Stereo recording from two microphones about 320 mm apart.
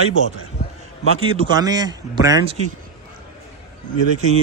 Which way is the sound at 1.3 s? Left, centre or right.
Centre.